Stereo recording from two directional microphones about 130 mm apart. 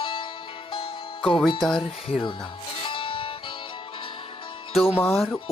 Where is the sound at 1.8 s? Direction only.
45° left (ahead or behind).